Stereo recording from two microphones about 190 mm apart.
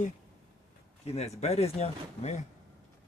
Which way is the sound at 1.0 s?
35° left (ahead or behind).